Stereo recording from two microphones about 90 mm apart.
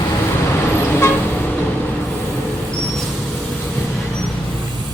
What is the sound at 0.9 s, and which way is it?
Vehicle, 25° left (ahead or behind).